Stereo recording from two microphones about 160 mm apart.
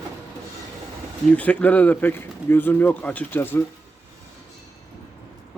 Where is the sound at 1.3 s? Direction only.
10° left (ahead or behind).